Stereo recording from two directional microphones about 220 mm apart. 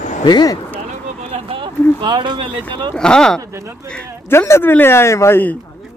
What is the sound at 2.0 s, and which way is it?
Speech, 20° right (ahead or behind).